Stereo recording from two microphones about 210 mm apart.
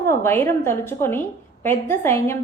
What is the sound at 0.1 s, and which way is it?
A woman's voice, 10° left (ahead or behind).